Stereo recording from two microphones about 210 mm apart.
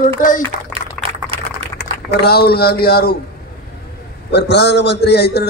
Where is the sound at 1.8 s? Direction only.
50° left (ahead or behind).